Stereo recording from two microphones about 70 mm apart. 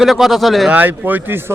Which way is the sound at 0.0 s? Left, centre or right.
Centre.